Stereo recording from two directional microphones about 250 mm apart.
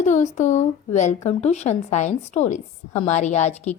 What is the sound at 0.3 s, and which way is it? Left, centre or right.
A woman's voice, left.